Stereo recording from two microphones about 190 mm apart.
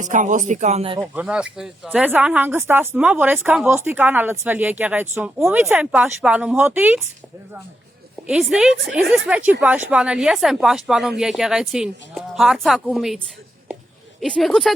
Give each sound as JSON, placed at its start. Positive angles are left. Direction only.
{"t": 0.0, "sound": "speech", "side_deg": -40}
{"t": 1.0, "sound": "speech", "side_deg": -5}
{"t": 8.3, "sound": "speech", "side_deg": -5}